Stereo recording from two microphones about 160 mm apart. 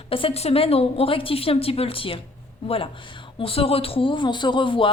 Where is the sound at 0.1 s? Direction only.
35° left (ahead or behind).